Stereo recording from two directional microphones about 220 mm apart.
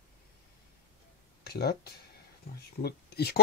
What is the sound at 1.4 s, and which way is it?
Speech, 45° left (ahead or behind).